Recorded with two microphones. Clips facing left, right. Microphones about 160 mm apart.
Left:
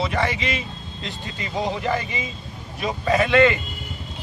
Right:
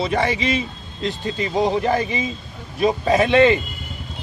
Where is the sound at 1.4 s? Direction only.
30° right (ahead or behind).